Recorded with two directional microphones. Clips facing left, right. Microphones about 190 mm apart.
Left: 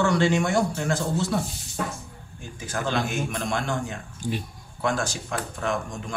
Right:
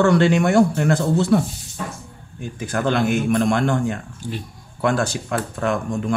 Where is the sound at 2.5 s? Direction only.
60° right (ahead or behind).